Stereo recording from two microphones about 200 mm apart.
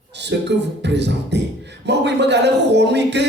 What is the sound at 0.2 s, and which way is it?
Speech, 60° right (ahead or behind).